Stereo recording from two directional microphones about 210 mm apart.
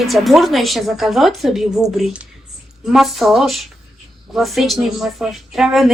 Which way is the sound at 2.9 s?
Centre (ahead or behind).